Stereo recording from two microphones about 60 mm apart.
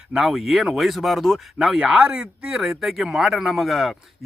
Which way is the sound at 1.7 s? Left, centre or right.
Centre.